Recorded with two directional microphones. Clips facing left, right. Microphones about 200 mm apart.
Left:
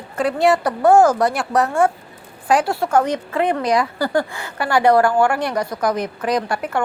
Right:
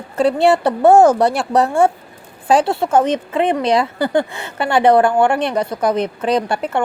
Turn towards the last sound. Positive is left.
turn(degrees=-25)  # may be behind; listen again after turning